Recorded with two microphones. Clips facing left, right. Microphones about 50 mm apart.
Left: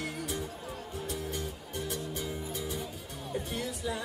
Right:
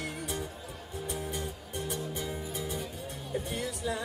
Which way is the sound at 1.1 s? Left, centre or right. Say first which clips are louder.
Right 1 dB; centre.